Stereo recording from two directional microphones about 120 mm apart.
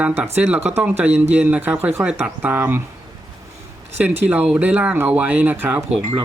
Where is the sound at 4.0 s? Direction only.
15° right (ahead or behind).